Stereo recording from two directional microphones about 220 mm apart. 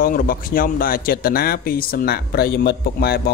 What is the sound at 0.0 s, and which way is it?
Speech, 40° left (ahead or behind).